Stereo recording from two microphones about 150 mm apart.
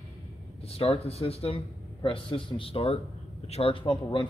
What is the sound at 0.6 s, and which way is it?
A man's voice, 40° left (ahead or behind).